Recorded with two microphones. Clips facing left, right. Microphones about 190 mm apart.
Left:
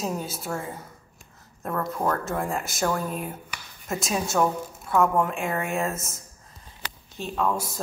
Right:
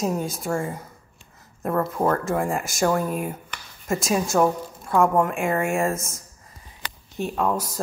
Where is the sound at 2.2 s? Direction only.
Centre (ahead or behind).